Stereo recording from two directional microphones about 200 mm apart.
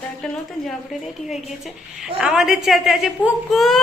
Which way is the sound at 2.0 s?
Centre (ahead or behind).